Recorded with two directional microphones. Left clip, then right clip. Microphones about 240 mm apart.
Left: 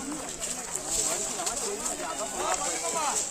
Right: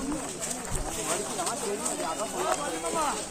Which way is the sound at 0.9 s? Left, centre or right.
Centre.